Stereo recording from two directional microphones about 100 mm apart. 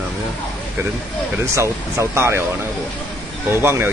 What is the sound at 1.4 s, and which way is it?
Speech, 30° right (ahead or behind).